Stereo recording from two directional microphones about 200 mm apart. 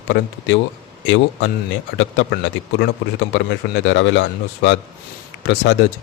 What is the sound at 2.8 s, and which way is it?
A man's voice, 65° left (ahead or behind).